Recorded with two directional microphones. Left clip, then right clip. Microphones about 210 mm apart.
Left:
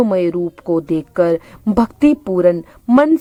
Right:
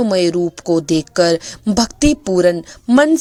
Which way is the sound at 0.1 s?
20° right (ahead or behind).